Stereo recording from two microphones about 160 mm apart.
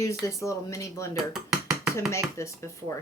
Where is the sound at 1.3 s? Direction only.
Centre (ahead or behind).